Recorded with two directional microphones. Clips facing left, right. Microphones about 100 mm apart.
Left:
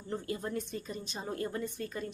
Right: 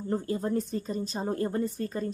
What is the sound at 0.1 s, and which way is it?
Speech, 35° right (ahead or behind).